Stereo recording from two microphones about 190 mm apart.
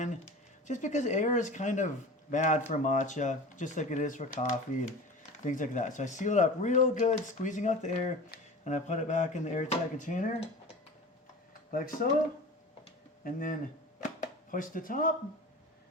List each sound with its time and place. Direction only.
0.0 s speech: 40° left (ahead or behind)
11.7 s speech: 50° left (ahead or behind)
13.2 s speech: 45° left (ahead or behind)
14.2 s a sound: 45° left (ahead or behind)